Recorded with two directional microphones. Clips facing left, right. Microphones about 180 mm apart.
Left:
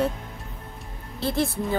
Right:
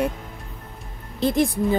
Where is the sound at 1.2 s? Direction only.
15° right (ahead or behind).